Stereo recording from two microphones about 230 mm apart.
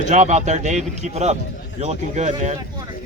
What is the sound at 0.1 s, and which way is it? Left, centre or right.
Speech, right.